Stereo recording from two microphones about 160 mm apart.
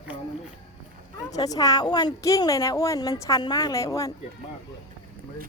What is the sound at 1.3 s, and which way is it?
A woman's voice, 25° left (ahead or behind).